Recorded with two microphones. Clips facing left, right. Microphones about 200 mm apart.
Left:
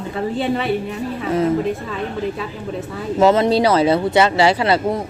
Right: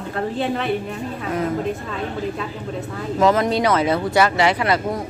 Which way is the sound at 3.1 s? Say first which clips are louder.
Left 4 dB; 25° left (ahead or behind).